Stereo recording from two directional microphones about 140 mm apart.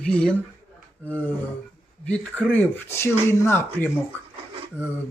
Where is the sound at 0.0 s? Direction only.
5° left (ahead or behind).